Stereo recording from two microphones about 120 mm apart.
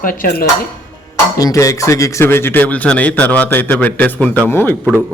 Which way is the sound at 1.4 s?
30° left (ahead or behind).